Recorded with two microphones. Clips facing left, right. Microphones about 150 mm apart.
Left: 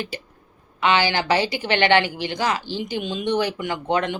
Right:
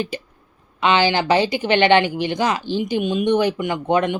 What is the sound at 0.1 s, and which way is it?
Speech, 20° right (ahead or behind).